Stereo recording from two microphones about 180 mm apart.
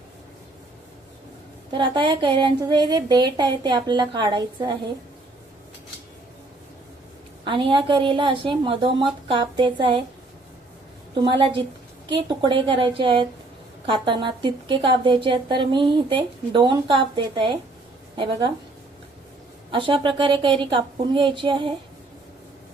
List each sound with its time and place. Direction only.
1.8 s a woman's voice: 25° right (ahead or behind)
7.4 s a woman's voice: 30° right (ahead or behind)
11.1 s a woman's voice: 25° right (ahead or behind)
19.7 s a woman's voice: 25° right (ahead or behind)